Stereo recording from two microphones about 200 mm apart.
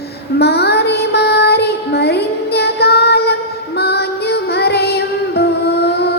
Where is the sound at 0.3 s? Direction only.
55° left (ahead or behind).